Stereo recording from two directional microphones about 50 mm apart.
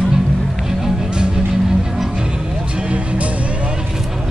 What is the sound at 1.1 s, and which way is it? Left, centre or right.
Music, centre.